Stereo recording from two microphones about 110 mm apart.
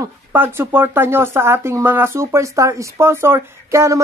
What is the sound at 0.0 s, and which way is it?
Speech, 20° right (ahead or behind).